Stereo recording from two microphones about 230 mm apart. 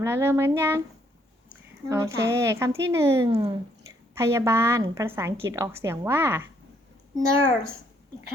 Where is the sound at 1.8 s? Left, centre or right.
Centre.